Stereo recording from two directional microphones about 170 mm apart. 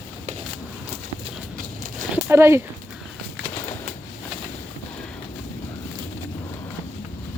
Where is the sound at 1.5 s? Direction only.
55° right (ahead or behind).